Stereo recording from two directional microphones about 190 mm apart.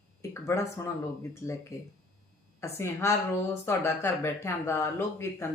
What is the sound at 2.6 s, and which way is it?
Speech, 15° left (ahead or behind).